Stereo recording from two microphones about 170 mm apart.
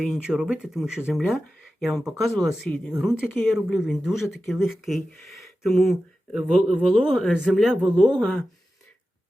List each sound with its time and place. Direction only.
0.0 s speech: 5° right (ahead or behind)